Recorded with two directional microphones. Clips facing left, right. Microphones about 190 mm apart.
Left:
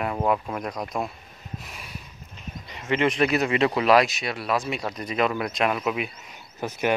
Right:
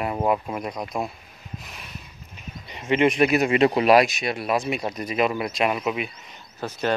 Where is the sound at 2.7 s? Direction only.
20° right (ahead or behind); by 6.1 s centre (ahead or behind).